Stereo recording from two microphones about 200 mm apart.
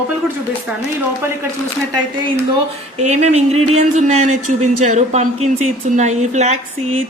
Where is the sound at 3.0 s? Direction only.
35° right (ahead or behind).